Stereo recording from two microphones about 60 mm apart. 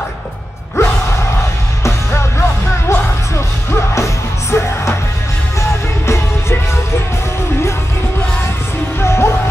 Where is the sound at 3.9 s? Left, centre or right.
Left.